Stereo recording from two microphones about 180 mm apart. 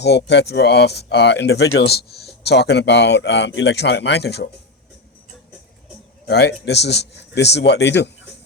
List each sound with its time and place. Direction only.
0.0 s speech: 70° left (ahead or behind)
6.2 s speech: 70° left (ahead or behind)